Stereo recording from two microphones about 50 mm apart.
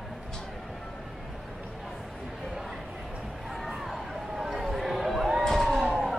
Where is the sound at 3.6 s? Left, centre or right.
Centre.